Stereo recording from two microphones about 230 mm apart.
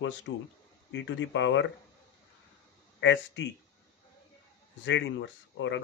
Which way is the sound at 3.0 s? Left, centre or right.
Left.